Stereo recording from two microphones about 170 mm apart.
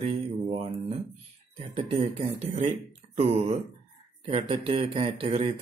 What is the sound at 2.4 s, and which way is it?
Mantra, 40° right (ahead or behind).